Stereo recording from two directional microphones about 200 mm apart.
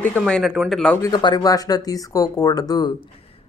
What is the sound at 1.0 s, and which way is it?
Speech, 20° left (ahead or behind).